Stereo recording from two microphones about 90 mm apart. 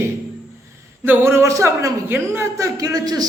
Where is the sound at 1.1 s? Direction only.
25° right (ahead or behind).